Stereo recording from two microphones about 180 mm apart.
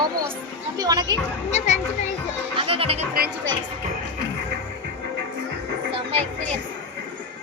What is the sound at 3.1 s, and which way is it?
Speech, 60° right (ahead or behind).